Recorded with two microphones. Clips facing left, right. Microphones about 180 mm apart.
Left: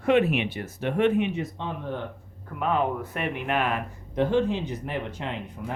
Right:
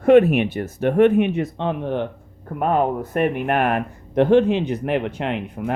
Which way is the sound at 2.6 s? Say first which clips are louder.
Right 6 dB; 50° right (ahead or behind).